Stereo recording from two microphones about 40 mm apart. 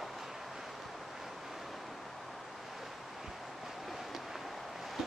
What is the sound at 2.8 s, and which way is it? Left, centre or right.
Waves, centre.